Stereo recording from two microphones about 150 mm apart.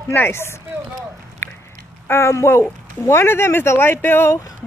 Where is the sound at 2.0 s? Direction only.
15° left (ahead or behind).